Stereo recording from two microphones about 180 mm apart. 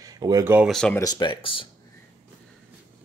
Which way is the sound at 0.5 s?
Centre (ahead or behind).